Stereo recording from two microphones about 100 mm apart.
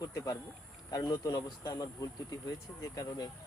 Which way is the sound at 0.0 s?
35° left (ahead or behind).